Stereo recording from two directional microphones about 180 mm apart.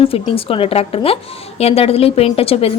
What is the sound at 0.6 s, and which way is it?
A woman's voice, 30° left (ahead or behind).